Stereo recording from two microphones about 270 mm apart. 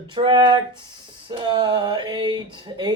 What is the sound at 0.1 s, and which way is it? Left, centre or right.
Speech, centre.